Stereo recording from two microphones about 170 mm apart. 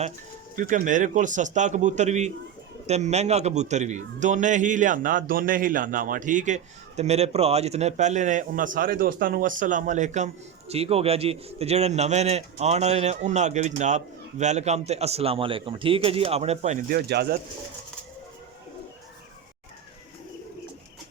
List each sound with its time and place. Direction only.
0.5 s a man's voice: 55° right (ahead or behind)
16.9 s speech: 70° right (ahead or behind)